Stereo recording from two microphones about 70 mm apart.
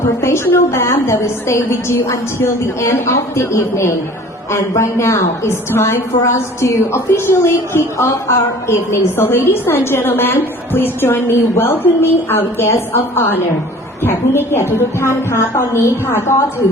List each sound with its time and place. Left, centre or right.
0.2 s a woman's voice: left